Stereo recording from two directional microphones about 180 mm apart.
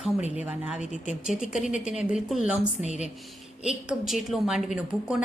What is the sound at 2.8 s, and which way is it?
Speech, 40° left (ahead or behind).